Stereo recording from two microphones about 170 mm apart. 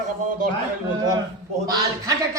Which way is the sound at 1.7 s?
20° right (ahead or behind).